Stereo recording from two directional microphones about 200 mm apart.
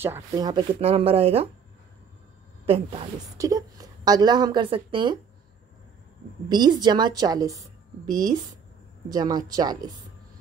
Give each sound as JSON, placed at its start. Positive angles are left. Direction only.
{"t": 0.0, "sound": "a woman's voice", "side_deg": -15}
{"t": 2.6, "sound": "a woman's voice", "side_deg": -30}
{"t": 3.3, "sound": "a woman's voice", "side_deg": -15}
{"t": 6.5, "sound": "a woman's voice", "side_deg": -20}